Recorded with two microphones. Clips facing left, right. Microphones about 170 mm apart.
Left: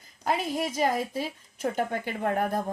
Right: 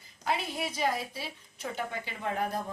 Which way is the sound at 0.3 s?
45° left (ahead or behind).